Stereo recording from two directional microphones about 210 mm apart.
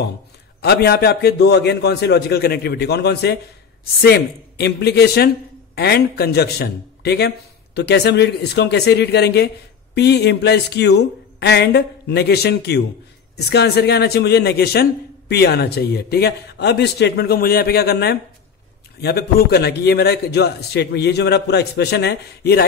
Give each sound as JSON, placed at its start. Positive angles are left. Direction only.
{"t": 0.6, "sound": "a man's voice", "side_deg": 50}